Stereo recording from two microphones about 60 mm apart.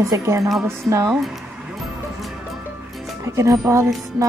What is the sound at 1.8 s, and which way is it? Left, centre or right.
Music, centre.